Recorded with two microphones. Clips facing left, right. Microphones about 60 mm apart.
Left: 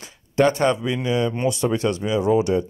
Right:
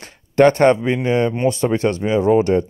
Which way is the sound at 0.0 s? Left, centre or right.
Right.